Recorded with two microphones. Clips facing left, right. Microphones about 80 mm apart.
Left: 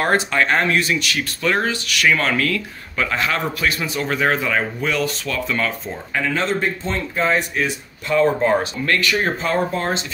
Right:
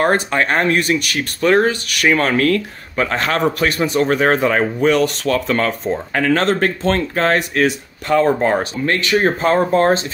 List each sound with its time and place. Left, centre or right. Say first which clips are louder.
0.0 s a man's voice: right 2 dB; right
8.4 s speech: right 1 dB; right
9.4 s a man's voice: right 7 dB; right